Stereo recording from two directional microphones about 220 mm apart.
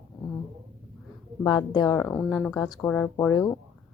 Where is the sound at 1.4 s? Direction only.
20° left (ahead or behind).